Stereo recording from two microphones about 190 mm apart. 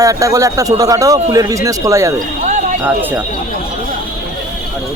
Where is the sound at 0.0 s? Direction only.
15° right (ahead or behind).